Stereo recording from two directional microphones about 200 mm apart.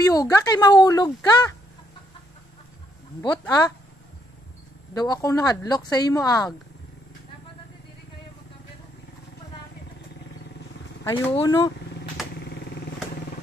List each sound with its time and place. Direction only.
0.0 s speech: 15° left (ahead or behind)
3.2 s speech: 20° left (ahead or behind)
4.9 s speech: 20° left (ahead or behind)
11.3 s speech: 20° left (ahead or behind)